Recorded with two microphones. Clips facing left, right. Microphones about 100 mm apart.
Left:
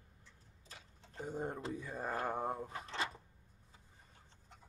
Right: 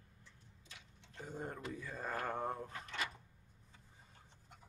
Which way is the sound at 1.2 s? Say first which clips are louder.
Left 4 dB; 20° left (ahead or behind).